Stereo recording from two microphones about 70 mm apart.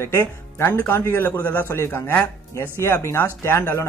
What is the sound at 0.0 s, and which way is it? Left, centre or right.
A man's voice, left.